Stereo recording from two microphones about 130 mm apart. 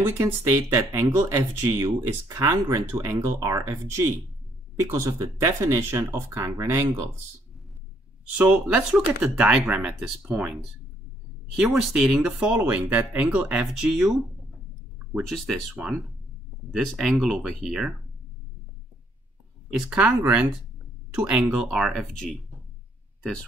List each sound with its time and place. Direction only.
0.0 s speech: 20° right (ahead or behind)
8.4 s speech: 10° right (ahead or behind)
15.1 s speech: centre (ahead or behind)
16.7 s speech: centre (ahead or behind)
19.7 s speech: 5° right (ahead or behind)